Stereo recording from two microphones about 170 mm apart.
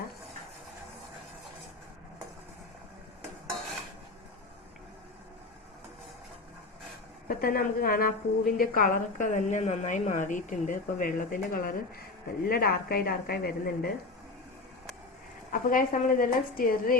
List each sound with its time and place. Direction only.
7.3 s a woman's voice: 60° left (ahead or behind)
15.7 s a woman's voice: 50° left (ahead or behind)